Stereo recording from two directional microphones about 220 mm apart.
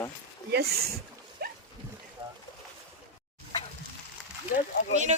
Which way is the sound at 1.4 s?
45° right (ahead or behind).